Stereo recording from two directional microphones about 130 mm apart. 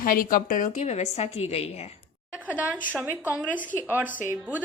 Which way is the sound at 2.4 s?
10° right (ahead or behind).